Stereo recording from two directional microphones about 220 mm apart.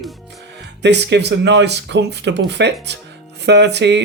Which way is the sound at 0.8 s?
50° right (ahead or behind).